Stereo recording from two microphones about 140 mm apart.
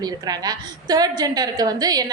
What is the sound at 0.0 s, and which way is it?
A woman's voice, 30° right (ahead or behind).